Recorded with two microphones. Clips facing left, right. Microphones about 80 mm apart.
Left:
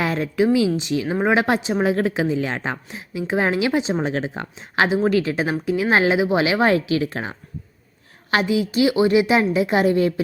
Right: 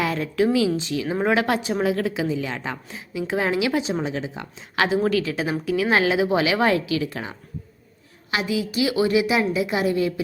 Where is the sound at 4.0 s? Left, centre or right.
Left.